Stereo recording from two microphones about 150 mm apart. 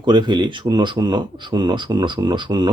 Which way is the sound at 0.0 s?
30° right (ahead or behind).